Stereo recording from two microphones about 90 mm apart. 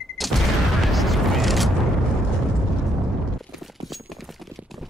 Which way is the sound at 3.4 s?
Centre (ahead or behind).